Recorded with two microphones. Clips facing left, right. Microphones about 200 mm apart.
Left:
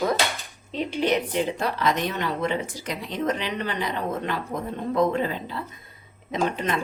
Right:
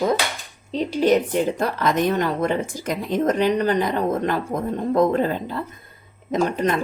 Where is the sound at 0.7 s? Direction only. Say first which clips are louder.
Right 6 dB; 40° right (ahead or behind).